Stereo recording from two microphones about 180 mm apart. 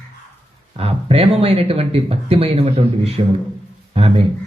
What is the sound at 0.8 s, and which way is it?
Speech, 35° right (ahead or behind).